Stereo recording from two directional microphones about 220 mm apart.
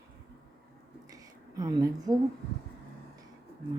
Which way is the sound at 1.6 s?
15° right (ahead or behind).